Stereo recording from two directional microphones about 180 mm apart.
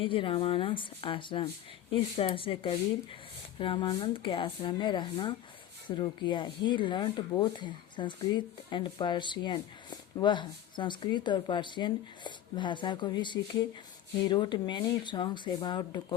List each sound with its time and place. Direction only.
0.0 s speech: 30° left (ahead or behind)